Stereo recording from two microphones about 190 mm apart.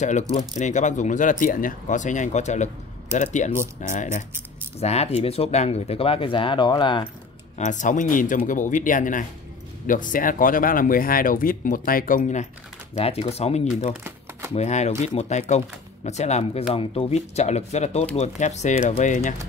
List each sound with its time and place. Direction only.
0.0 s speech: 35° left (ahead or behind)
7.5 s speech: 40° left (ahead or behind)
12.9 s speech: 30° left (ahead or behind)